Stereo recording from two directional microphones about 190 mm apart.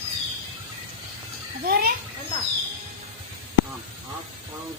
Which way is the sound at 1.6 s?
50° right (ahead or behind).